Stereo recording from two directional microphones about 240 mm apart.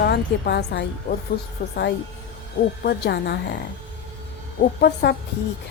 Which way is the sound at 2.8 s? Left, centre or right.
Left.